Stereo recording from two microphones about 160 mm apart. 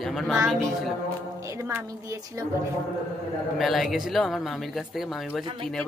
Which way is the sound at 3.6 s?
Centre (ahead or behind).